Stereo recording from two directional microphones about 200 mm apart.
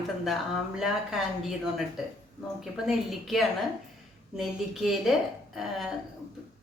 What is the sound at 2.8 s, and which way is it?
A woman's voice, centre (ahead or behind).